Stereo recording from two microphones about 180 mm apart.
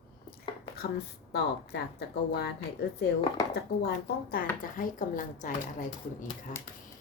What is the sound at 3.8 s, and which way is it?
Speech, 55° left (ahead or behind).